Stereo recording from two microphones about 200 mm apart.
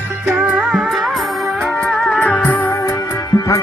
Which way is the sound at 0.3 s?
5° right (ahead or behind).